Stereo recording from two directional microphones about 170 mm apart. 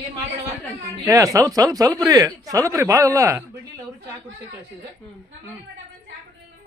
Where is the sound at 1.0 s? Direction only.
20° right (ahead or behind).